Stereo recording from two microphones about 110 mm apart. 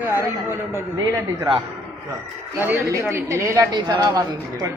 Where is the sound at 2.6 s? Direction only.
20° right (ahead or behind).